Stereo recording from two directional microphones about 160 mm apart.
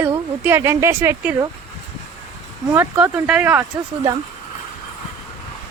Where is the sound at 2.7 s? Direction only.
15° right (ahead or behind).